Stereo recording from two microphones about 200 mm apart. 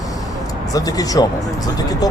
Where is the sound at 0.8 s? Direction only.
20° left (ahead or behind).